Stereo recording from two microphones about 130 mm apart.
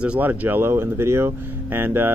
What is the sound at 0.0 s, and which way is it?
Speech, 10° right (ahead or behind).